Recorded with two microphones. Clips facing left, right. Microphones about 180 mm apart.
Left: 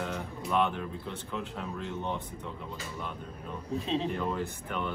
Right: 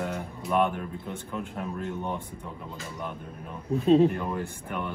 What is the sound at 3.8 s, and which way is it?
Speech, 50° right (ahead or behind).